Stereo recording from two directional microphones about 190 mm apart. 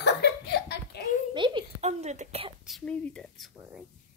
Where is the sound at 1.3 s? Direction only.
25° right (ahead or behind).